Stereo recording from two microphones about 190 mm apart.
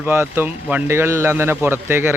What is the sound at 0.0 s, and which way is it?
A man's voice, 10° right (ahead or behind).